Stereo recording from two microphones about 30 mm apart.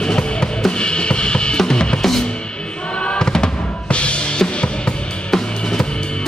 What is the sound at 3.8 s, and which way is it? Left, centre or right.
Music, left.